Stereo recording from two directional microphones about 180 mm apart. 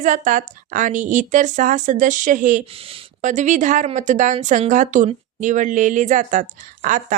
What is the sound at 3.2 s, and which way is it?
Speech, 45° right (ahead or behind).